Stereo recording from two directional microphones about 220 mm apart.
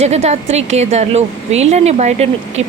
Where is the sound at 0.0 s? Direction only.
30° right (ahead or behind).